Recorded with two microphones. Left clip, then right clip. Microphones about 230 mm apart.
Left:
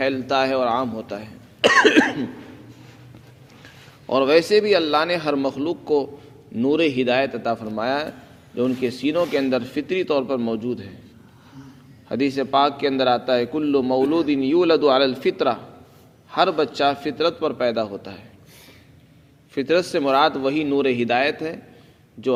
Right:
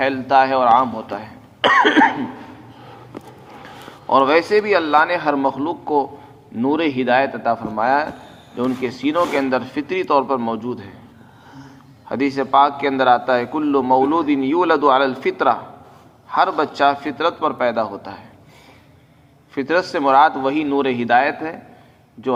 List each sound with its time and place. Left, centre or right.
0.0 s speech: left
4.1 s a man's voice: left
12.0 s a man's voice: left
19.5 s a man's voice: left